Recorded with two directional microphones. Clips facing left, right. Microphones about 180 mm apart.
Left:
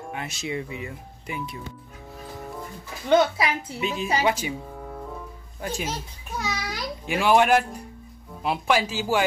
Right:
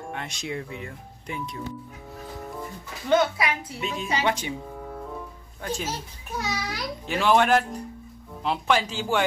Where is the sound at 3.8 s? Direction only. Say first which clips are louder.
Left 2 dB; 5° left (ahead or behind).